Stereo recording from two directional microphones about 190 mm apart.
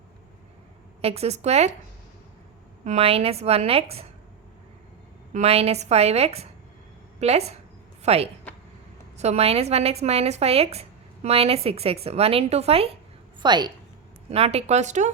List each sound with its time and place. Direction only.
1.0 s a woman's voice: 35° right (ahead or behind)
2.8 s a woman's voice: 35° right (ahead or behind)
5.3 s a woman's voice: 35° right (ahead or behind)